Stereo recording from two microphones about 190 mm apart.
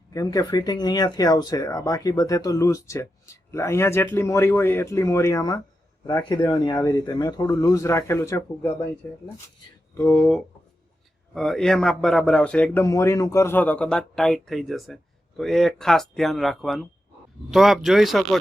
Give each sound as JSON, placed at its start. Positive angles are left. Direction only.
{"t": 0.1, "sound": "speech", "side_deg": 20}
{"t": 10.0, "sound": "a man's voice", "side_deg": 10}